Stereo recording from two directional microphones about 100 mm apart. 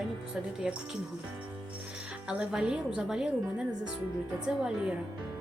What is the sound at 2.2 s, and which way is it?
A woman's voice, 10° right (ahead or behind).